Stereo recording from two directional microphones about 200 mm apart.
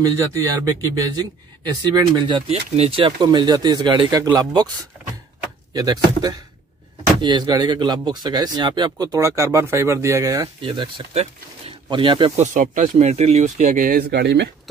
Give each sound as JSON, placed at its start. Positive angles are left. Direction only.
{"t": 0.0, "sound": "speech", "side_deg": -15}
{"t": 5.7, "sound": "speech", "side_deg": -20}
{"t": 12.4, "sound": "speech", "side_deg": -40}